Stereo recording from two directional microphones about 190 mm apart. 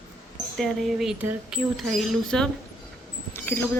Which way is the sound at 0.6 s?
Centre (ahead or behind).